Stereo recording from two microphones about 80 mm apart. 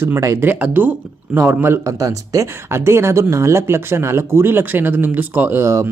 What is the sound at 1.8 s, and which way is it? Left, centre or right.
Speech, right.